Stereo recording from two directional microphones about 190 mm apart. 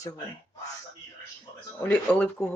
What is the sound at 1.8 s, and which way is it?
Speech, 10° left (ahead or behind).